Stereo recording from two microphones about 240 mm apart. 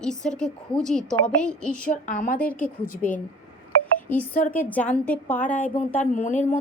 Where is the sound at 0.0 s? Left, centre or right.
Centre.